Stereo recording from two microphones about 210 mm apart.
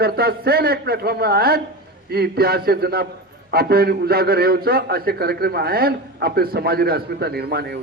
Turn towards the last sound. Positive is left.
turn(degrees=-50)  # may be behind; listen again after turning